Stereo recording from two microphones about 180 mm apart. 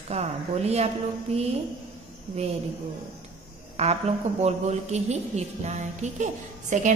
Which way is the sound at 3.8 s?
35° right (ahead or behind).